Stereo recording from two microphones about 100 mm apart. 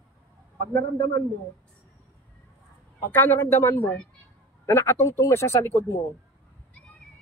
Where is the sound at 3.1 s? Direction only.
20° left (ahead or behind).